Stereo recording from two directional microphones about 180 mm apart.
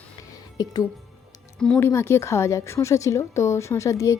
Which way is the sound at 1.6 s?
10° left (ahead or behind).